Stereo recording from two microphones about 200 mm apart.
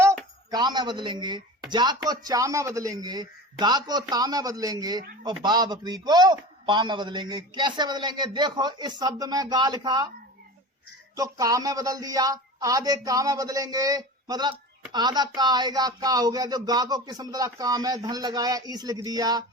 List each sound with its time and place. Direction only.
0.0 s a sound: 15° right (ahead or behind)
1.7 s a man's voice: 20° right (ahead or behind)
11.2 s a man's voice: 15° right (ahead or behind)